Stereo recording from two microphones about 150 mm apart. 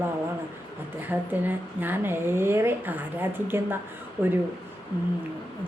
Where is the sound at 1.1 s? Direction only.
10° right (ahead or behind).